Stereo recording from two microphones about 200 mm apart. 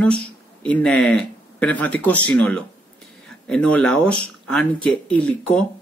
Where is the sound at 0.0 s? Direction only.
5° left (ahead or behind).